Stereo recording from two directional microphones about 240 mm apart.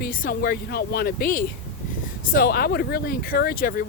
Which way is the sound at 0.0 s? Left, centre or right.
Left.